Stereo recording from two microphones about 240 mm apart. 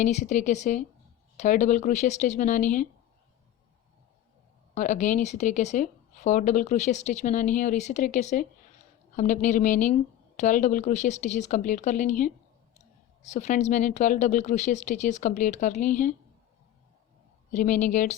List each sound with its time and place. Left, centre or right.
0.0 s a woman's voice: left
4.7 s a woman's voice: left
17.5 s a woman's voice: left